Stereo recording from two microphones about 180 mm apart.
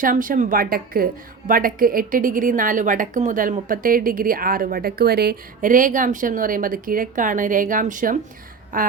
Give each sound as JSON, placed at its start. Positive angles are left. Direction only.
{"t": 0.0, "sound": "a woman's voice", "side_deg": -50}